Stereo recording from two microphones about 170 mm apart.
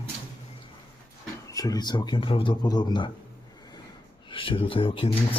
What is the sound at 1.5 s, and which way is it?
A man's voice, 20° left (ahead or behind).